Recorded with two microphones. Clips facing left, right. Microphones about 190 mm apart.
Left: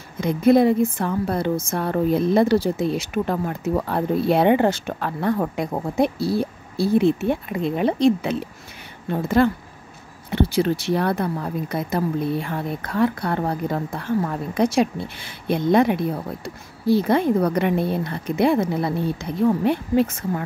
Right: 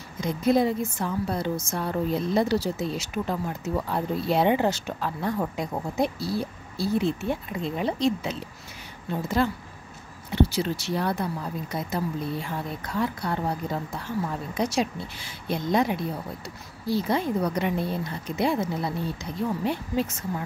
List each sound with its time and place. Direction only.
0.2 s speech: 60° left (ahead or behind)